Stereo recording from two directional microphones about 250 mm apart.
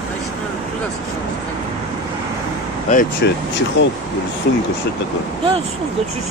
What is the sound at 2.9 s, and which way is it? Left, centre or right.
Speech, left.